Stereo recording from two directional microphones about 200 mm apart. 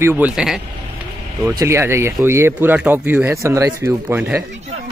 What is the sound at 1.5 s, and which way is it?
Speech, 15° right (ahead or behind).